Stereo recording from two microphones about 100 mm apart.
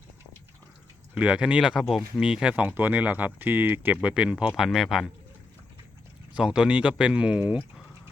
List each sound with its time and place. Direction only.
1.1 s speech: 10° right (ahead or behind)
6.3 s speech: 5° right (ahead or behind)